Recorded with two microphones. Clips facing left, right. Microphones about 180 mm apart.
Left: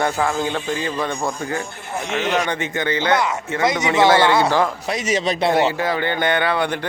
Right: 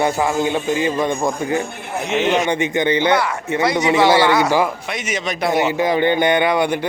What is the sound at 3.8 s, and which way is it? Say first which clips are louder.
A man's voice: right 1 dB; 20° left (ahead or behind).